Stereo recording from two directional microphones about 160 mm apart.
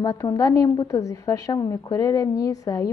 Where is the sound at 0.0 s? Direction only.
20° left (ahead or behind).